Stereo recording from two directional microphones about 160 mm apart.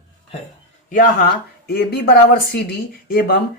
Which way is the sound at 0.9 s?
55° left (ahead or behind).